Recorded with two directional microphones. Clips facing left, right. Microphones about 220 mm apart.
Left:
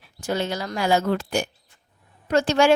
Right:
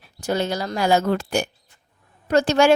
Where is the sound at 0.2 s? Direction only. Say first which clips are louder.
Right 3 dB; 40° right (ahead or behind).